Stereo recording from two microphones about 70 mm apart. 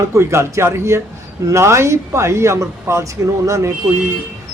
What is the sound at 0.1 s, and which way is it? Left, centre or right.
A man's voice, right.